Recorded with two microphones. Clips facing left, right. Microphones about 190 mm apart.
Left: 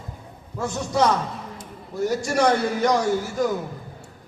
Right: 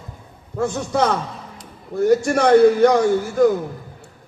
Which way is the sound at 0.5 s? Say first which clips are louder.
Right 3 dB; 60° right (ahead or behind).